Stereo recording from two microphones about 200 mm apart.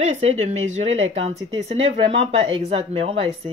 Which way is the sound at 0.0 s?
30° right (ahead or behind).